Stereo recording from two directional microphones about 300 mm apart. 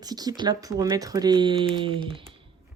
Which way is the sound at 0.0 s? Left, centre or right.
Centre.